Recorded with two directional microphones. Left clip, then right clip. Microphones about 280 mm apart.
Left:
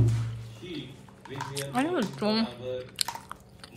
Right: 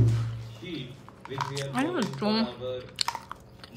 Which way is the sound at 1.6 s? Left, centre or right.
Centre.